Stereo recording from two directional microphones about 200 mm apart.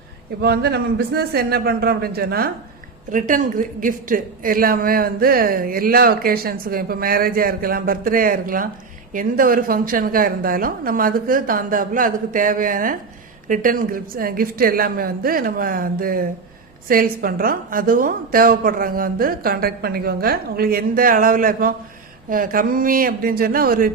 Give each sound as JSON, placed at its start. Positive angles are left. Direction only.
{"t": 0.4, "sound": "speech", "side_deg": -55}
{"t": 3.1, "sound": "speech", "side_deg": -40}